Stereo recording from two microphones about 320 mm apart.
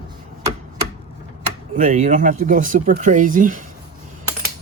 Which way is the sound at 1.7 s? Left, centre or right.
Right.